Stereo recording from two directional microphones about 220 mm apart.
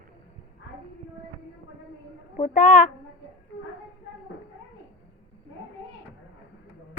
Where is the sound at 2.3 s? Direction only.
35° left (ahead or behind).